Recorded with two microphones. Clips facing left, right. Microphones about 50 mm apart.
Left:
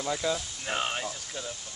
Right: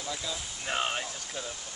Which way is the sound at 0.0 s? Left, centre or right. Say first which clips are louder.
Left 7 dB; left.